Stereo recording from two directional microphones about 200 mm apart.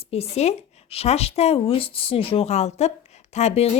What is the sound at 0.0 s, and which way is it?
Speech, 30° left (ahead or behind).